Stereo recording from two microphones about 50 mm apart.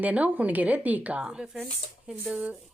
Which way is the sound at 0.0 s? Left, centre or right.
Right.